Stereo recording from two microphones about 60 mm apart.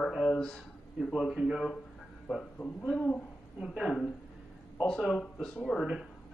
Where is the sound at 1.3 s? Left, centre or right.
Centre.